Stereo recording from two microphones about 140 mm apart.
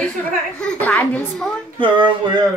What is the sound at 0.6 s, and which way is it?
Speech, 10° left (ahead or behind).